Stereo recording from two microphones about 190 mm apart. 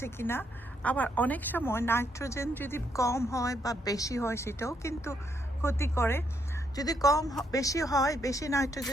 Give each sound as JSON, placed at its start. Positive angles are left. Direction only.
{"t": 0.0, "sound": "a woman's voice", "side_deg": 10}